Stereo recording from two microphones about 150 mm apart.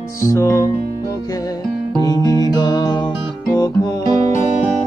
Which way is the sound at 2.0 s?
25° left (ahead or behind).